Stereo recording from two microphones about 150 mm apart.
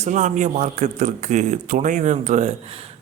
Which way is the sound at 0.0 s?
55° right (ahead or behind).